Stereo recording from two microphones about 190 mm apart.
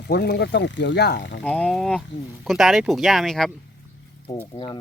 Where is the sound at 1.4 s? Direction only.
5° left (ahead or behind).